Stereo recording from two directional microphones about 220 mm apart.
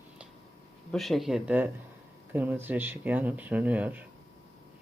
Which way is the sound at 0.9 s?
Centre (ahead or behind).